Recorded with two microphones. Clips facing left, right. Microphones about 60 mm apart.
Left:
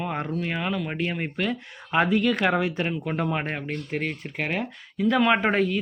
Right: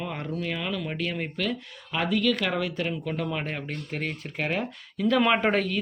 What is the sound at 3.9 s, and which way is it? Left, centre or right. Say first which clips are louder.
Speech: left 2 dB; centre.